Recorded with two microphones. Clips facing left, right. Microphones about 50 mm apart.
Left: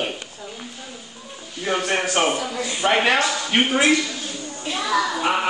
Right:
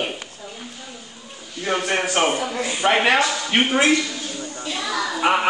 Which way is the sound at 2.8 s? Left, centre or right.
Centre.